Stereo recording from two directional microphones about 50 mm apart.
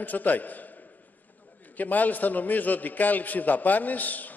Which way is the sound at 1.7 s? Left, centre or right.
Left.